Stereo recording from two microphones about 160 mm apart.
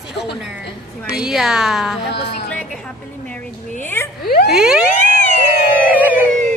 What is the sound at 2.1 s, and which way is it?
Speech, 90° left.